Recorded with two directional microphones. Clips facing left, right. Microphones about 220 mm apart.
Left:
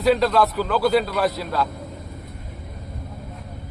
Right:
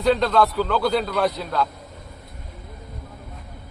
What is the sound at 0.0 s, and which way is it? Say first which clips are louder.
A man's voice: left 1 dB; 5° left (ahead or behind).